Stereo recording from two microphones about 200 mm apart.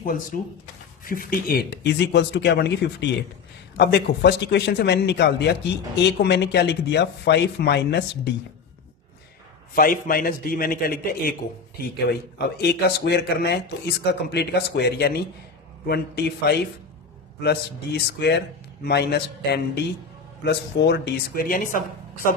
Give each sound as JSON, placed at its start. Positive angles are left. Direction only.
{"t": 0.0, "sound": "a man's voice", "side_deg": 45}
{"t": 9.7, "sound": "a man's voice", "side_deg": 45}
{"t": 12.5, "sound": "speech", "side_deg": 55}